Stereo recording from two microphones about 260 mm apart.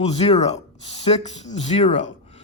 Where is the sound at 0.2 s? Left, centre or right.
Left.